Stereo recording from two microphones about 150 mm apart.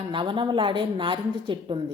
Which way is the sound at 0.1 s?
35° right (ahead or behind).